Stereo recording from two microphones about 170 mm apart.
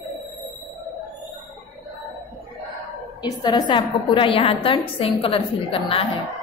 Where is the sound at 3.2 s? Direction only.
25° left (ahead or behind).